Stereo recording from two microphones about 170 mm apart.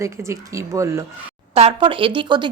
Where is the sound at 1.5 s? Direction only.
35° right (ahead or behind).